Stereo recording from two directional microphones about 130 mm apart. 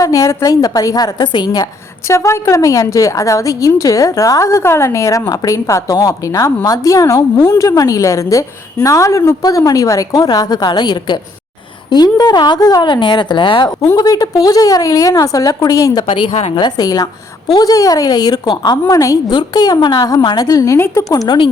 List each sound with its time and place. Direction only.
0.0 s a woman's voice: 25° left (ahead or behind)
2.0 s a woman's voice: 20° left (ahead or behind)
21.1 s a woman's voice: 30° left (ahead or behind)